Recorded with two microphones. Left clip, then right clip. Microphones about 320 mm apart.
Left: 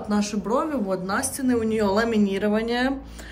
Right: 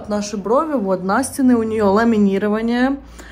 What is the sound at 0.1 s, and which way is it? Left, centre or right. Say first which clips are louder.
A woman's voice: right 7 dB; centre.